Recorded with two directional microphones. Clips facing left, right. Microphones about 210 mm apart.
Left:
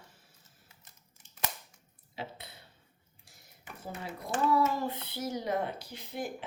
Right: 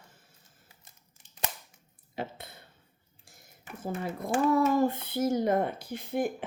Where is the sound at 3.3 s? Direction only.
50° right (ahead or behind).